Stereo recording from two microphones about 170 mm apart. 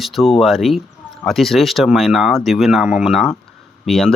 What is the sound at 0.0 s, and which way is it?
Speech, centre (ahead or behind).